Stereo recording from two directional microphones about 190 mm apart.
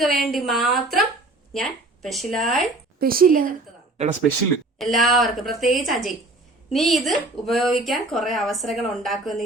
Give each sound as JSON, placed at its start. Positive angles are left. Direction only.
{"t": 0.0, "sound": "a woman's voice", "side_deg": 0}
{"t": 3.0, "sound": "speech", "side_deg": -50}
{"t": 4.0, "sound": "speech", "side_deg": -35}
{"t": 4.8, "sound": "a woman's voice", "side_deg": 0}